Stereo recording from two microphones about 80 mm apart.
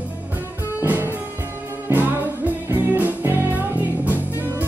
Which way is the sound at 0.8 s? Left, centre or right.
Right.